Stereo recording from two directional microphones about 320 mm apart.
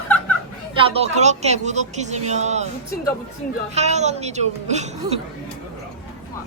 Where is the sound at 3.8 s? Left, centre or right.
Right.